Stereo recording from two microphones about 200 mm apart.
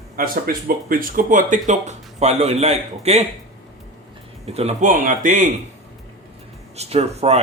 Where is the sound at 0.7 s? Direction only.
45° right (ahead or behind).